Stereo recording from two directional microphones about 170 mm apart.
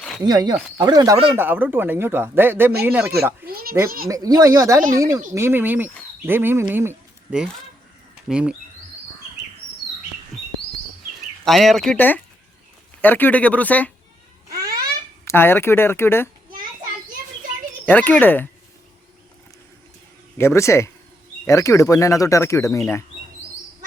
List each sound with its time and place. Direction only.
0.3 s speech: 25° right (ahead or behind)
3.4 s a child's voice: 60° right (ahead or behind)
4.1 s speech: 20° right (ahead or behind); by 8.5 s 5° right (ahead or behind)
11.4 s speech: centre (ahead or behind)
14.5 s babbling: 60° right (ahead or behind)
15.2 s speech: 15° left (ahead or behind)
17.8 s speech: 10° left (ahead or behind)
20.4 s speech: 15° left (ahead or behind)